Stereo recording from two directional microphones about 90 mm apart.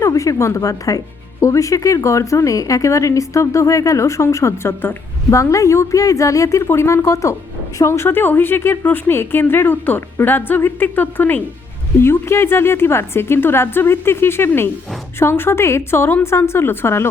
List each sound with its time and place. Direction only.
0.0 s a woman's voice: 35° left (ahead or behind)